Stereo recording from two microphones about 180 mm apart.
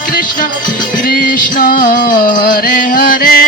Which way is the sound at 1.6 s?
50° left (ahead or behind).